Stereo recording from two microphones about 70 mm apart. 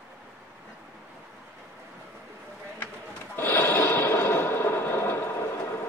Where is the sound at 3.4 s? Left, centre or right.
Left.